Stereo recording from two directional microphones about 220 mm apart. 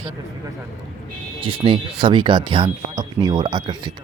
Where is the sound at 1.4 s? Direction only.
20° right (ahead or behind).